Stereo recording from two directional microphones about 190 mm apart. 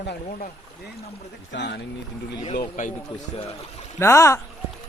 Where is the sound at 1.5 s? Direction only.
65° left (ahead or behind).